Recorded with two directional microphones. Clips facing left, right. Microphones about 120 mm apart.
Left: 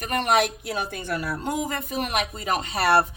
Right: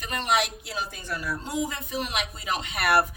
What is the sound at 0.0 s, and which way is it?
Speech, 50° left (ahead or behind).